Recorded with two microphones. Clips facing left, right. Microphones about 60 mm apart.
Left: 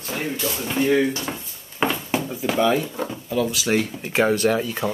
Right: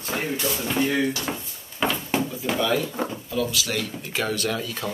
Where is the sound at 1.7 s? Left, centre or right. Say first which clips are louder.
Left 2 dB; left.